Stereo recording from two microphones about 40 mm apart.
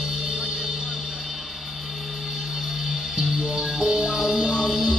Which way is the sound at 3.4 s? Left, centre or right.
Centre.